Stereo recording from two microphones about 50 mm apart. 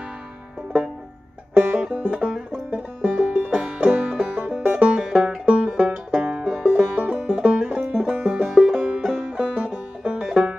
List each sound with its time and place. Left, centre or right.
1.5 s music: right
2.3 s banjo: centre
3.0 s music: right